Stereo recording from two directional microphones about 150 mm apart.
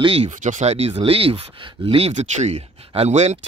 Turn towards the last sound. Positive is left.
turn(degrees=-50)  # may be behind; listen again after turning